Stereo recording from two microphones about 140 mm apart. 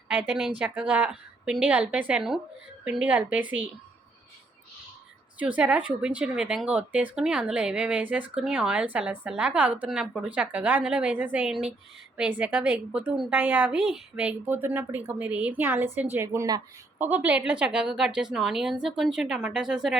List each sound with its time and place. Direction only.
0.1 s speech: 10° right (ahead or behind)
5.4 s speech: 10° right (ahead or behind)